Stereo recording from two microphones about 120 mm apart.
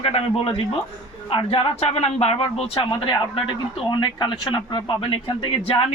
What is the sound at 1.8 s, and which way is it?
A man's voice, 60° left (ahead or behind).